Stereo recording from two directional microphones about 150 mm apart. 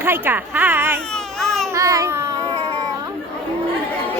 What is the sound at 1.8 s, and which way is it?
Babbling, 20° right (ahead or behind).